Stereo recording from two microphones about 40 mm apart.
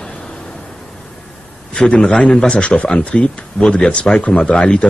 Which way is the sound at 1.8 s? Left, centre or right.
Left.